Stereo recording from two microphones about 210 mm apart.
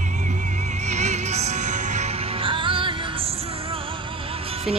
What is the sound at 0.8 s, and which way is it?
Music, 35° right (ahead or behind).